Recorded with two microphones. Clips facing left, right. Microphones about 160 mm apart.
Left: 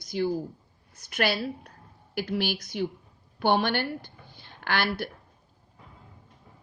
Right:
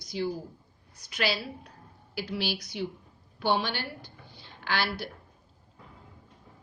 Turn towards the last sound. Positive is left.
turn(degrees=55)  # may be behind; listen again after turning